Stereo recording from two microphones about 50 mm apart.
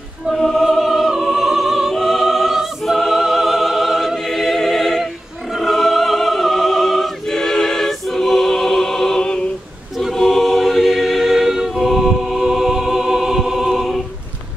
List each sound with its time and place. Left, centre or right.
0.4 s music: centre
5.6 s opera: centre
9.9 s choir: centre